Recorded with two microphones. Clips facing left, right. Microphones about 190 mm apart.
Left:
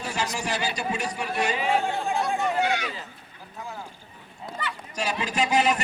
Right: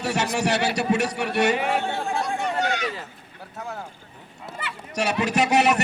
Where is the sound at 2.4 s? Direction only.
10° left (ahead or behind).